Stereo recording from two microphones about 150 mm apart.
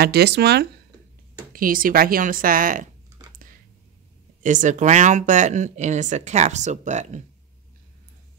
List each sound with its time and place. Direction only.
0.0 s speech: 90° right
1.5 s speech: 70° right (ahead or behind)
4.4 s speech: 55° right (ahead or behind)